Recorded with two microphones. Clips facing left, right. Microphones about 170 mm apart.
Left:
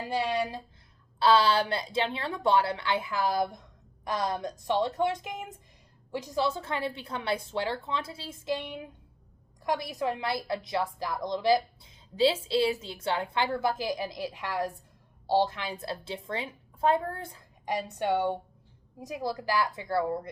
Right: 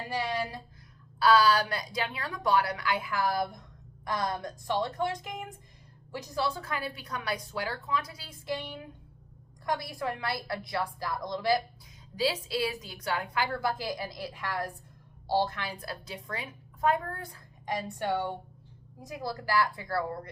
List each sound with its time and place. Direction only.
0.1 s a woman's voice: 20° left (ahead or behind)
9.6 s a woman's voice: 20° left (ahead or behind)